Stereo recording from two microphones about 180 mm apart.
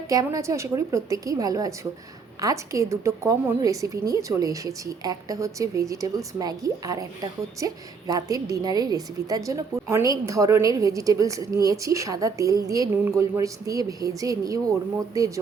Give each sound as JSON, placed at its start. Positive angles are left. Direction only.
{"t": 0.1, "sound": "a woman's voice", "side_deg": -20}